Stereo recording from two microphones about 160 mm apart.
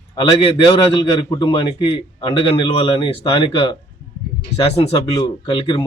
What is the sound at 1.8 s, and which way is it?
Speech, 30° left (ahead or behind).